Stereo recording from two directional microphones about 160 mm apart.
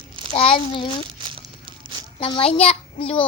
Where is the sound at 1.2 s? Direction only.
30° right (ahead or behind).